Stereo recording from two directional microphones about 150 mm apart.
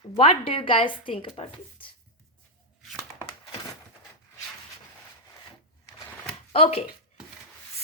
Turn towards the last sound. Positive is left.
turn(degrees=40)  # may be behind; listen again after turning